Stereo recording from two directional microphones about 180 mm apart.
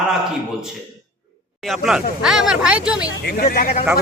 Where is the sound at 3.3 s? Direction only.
55° left (ahead or behind).